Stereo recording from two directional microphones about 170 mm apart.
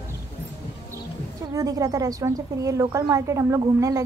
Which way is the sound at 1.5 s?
20° right (ahead or behind).